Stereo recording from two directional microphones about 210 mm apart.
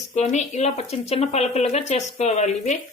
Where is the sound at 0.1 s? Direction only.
35° left (ahead or behind).